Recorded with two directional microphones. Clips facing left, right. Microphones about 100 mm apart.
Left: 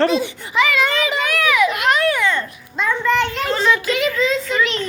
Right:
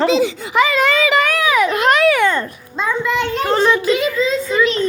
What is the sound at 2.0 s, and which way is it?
Babbling, 90° right.